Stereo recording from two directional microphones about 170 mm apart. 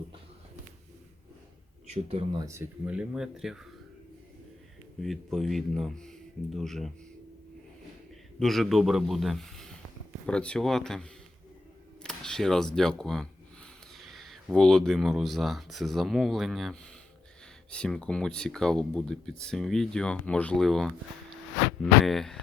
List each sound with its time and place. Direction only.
1.9 s speech: 35° right (ahead or behind)
2.4 s speech: 15° right (ahead or behind)
5.0 s speech: centre (ahead or behind)
8.4 s speech: centre (ahead or behind)
12.0 s speech: 5° left (ahead or behind)